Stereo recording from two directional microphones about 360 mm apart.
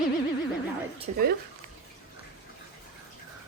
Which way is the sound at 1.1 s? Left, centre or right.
Centre.